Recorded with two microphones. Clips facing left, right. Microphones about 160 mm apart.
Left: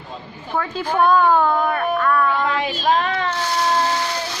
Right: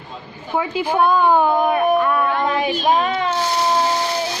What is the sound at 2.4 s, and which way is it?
Child singing, 15° right (ahead or behind).